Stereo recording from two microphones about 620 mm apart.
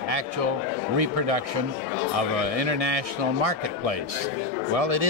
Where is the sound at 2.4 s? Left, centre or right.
Right.